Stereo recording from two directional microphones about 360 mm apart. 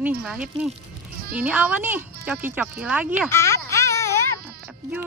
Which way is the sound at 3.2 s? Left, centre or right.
Centre.